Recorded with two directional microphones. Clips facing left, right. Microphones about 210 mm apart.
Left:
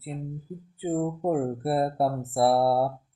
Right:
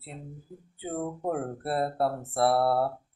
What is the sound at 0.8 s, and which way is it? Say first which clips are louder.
Speech: left 5 dB; 20° left (ahead or behind).